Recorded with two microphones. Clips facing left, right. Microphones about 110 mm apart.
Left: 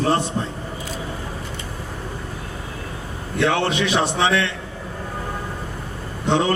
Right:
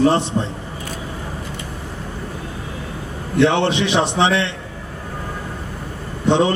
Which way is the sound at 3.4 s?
25° right (ahead or behind).